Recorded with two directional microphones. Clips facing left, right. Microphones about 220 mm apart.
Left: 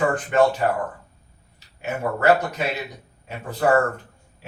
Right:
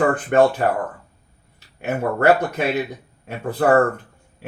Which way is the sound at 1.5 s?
60° right (ahead or behind).